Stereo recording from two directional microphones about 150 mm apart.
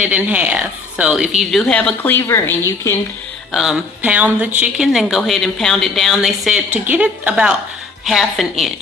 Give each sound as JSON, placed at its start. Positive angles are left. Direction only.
{"t": 0.0, "sound": "speech", "side_deg": -10}
{"t": 3.5, "sound": "a woman's voice", "side_deg": 0}